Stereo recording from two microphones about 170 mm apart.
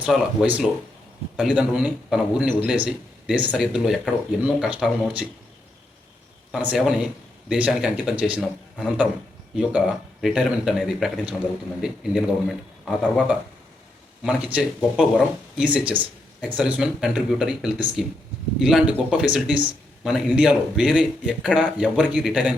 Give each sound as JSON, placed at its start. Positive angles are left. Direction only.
{"t": 0.0, "sound": "a man's voice", "side_deg": -10}
{"t": 6.7, "sound": "a man's voice", "side_deg": 0}